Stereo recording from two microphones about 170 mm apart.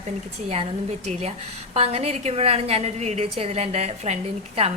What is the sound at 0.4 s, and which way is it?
A woman's voice, 40° right (ahead or behind).